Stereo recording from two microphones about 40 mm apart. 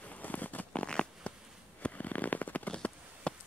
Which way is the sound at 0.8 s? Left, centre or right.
Left.